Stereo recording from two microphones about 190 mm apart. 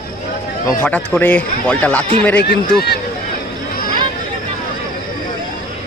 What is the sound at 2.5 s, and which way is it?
Speech, 60° left (ahead or behind).